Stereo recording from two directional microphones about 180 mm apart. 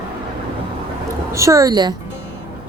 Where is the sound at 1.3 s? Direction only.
15° right (ahead or behind).